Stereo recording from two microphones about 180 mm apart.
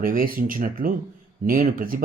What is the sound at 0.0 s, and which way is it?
Speech, 50° right (ahead or behind).